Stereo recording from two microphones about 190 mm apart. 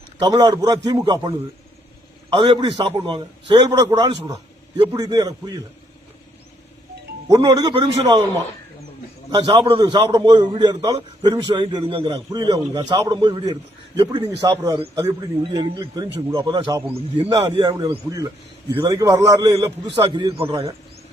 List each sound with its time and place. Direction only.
0.2 s a man's voice: 20° right (ahead or behind)
2.3 s a man's voice: 25° right (ahead or behind)
7.3 s a man's voice: 20° right (ahead or behind)
9.3 s a man's voice: 25° right (ahead or behind)
20.5 s a man's voice: 15° right (ahead or behind)